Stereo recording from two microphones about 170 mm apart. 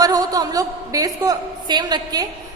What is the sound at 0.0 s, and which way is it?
A woman's voice, 20° right (ahead or behind).